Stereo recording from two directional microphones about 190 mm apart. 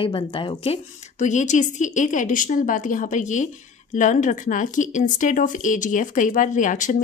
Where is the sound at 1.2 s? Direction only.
40° left (ahead or behind).